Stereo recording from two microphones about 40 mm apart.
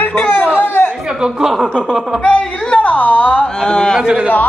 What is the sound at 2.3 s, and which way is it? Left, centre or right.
Speech, left.